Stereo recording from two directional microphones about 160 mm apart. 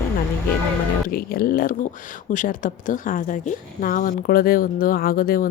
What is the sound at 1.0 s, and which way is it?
A woman's voice, 65° left (ahead or behind).